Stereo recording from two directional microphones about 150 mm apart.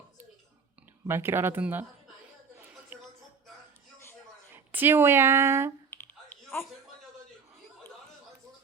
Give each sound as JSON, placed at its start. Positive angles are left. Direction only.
{"t": 1.0, "sound": "speech", "side_deg": -15}
{"t": 2.6, "sound": "a sound", "side_deg": -10}
{"t": 4.5, "sound": "a woman's voice", "side_deg": -15}
{"t": 5.9, "sound": "clicking", "side_deg": 15}
{"t": 6.5, "sound": "a man's voice", "side_deg": 15}